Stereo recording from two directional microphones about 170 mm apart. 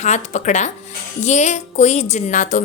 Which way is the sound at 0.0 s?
45° left (ahead or behind).